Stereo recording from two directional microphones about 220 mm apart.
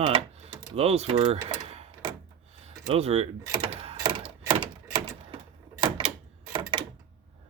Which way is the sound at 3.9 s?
20° right (ahead or behind).